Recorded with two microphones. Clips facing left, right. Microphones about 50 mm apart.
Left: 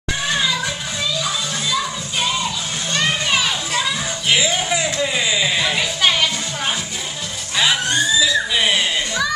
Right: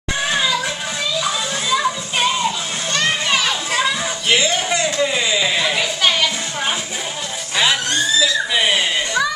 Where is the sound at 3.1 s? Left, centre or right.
Centre.